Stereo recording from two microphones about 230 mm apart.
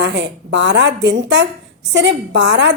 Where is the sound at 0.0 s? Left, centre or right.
Right.